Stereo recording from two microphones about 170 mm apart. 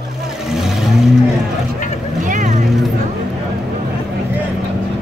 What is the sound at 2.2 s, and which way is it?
Vehicle, 50° right (ahead or behind).